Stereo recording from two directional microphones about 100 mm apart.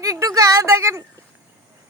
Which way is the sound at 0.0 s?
35° right (ahead or behind).